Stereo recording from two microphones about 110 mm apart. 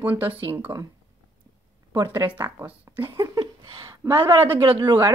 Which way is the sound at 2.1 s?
20° right (ahead or behind).